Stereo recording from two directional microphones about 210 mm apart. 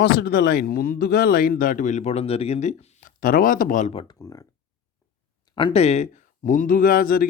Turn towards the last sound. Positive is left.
turn(degrees=40)  # may be behind; listen again after turning